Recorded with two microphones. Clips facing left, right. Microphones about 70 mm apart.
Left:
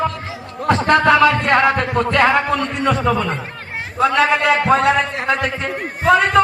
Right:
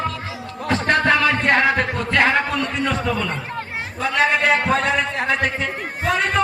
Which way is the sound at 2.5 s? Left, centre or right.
Left.